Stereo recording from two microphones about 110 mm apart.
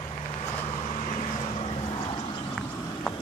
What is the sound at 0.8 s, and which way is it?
Vehicle, 90° left.